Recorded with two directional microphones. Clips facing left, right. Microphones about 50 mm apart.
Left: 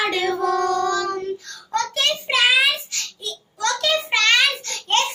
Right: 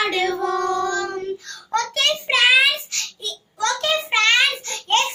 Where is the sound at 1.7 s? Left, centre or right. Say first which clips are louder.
Right 1 dB; right.